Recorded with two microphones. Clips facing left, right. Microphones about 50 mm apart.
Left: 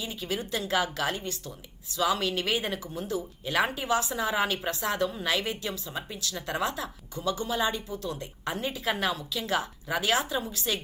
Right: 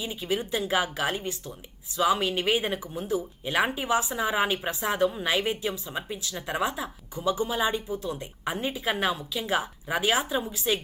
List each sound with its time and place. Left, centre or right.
0.0 s speech: centre